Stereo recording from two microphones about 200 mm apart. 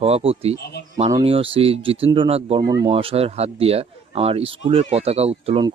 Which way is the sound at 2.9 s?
30° right (ahead or behind).